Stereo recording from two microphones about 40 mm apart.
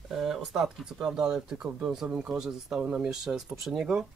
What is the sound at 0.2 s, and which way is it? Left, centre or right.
Speech, centre.